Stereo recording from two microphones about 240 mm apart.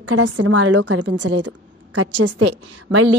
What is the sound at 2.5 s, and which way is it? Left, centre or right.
Speech, right.